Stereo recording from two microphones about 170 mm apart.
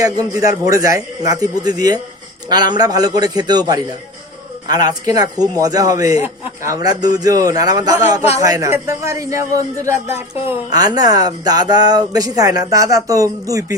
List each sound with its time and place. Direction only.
0.0 s a man's voice: 20° right (ahead or behind)